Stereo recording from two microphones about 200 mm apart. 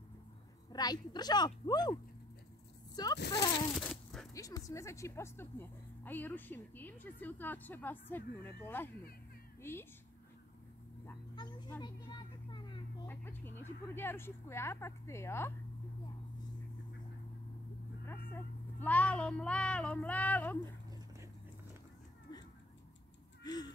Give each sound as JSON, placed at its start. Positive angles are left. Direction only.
{"t": 0.7, "sound": "a woman's voice", "side_deg": 20}
{"t": 3.2, "sound": "speech", "side_deg": 55}
{"t": 3.8, "sound": "a sound", "side_deg": 0}
{"t": 4.3, "sound": "speech", "side_deg": 15}
{"t": 11.3, "sound": "speech", "side_deg": 20}
{"t": 11.8, "sound": "a sound", "side_deg": 20}
{"t": 13.1, "sound": "speech", "side_deg": 10}
{"t": 18.3, "sound": "speech", "side_deg": 10}
{"t": 22.3, "sound": "a sound", "side_deg": 20}